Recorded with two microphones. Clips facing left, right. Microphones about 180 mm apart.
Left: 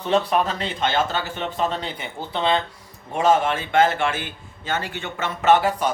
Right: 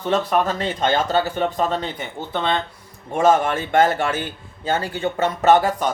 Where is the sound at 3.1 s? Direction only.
45° right (ahead or behind).